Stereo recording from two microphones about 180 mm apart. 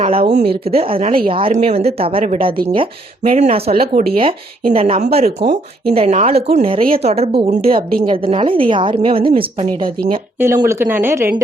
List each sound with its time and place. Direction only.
0.0 s a woman's voice: 30° right (ahead or behind)
7.8 s a woman's voice: 55° right (ahead or behind)
8.1 s a woman's voice: 30° right (ahead or behind)
10.4 s speech: 10° right (ahead or behind)